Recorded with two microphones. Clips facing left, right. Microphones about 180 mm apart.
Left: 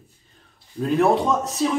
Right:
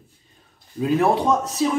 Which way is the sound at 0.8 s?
Centre (ahead or behind).